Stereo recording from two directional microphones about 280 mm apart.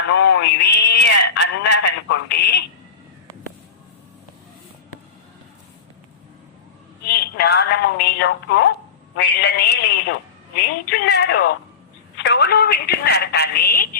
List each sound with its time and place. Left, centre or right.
0.1 s a man's voice: left
7.3 s a woman's voice: left